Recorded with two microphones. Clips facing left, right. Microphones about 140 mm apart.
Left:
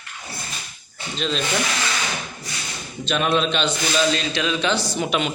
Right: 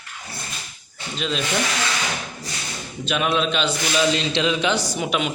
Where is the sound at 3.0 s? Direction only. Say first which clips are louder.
Left 1 dB; 5° right (ahead or behind).